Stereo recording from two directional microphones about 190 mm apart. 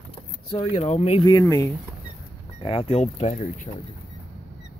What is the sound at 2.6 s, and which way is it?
Speech, 30° left (ahead or behind).